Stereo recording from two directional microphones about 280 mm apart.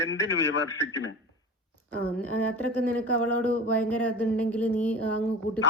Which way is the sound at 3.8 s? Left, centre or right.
Centre.